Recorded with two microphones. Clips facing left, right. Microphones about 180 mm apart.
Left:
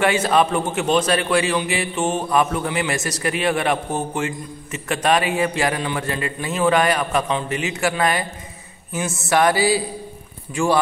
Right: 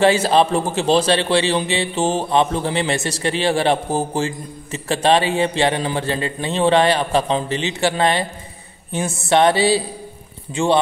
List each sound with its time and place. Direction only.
0.0 s a man's voice: 30° right (ahead or behind)
9.3 s a man's voice: 25° right (ahead or behind)